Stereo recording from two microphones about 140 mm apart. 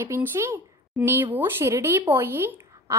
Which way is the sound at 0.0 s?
15° right (ahead or behind).